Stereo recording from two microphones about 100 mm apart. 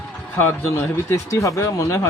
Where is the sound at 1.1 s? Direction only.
30° left (ahead or behind).